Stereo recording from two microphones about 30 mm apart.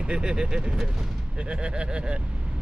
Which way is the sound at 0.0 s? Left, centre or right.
Right.